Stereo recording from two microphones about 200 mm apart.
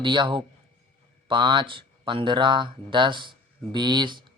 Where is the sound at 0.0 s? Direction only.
25° right (ahead or behind).